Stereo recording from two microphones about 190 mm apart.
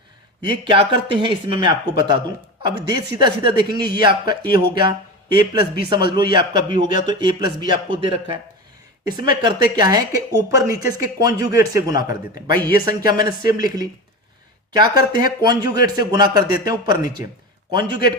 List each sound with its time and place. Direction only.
0.5 s a man's voice: 25° right (ahead or behind)